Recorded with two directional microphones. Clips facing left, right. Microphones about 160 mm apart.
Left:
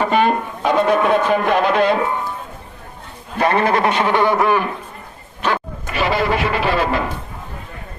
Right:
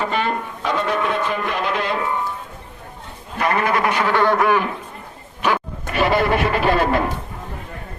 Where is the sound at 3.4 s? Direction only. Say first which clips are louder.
Left 3 dB; 30° left (ahead or behind).